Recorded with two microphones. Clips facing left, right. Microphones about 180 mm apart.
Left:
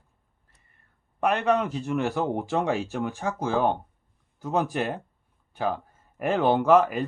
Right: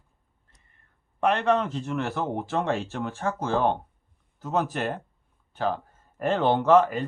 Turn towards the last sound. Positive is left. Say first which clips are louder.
# even
turn(degrees=10)  # may be behind; listen again after turning